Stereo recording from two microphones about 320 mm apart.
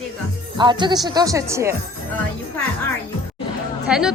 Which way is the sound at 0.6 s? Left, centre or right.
Centre.